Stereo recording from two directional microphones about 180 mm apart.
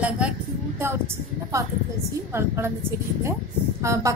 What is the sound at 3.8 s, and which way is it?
Speech, 15° right (ahead or behind).